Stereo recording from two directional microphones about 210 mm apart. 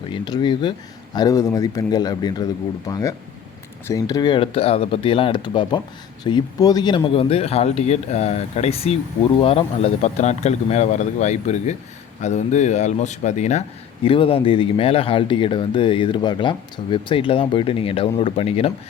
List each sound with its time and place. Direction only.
0.1 s a man's voice: 20° left (ahead or behind)